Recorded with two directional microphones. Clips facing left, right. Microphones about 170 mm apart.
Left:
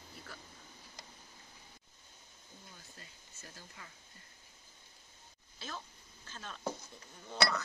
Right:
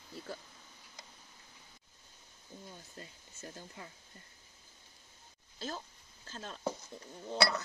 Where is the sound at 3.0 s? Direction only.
30° right (ahead or behind).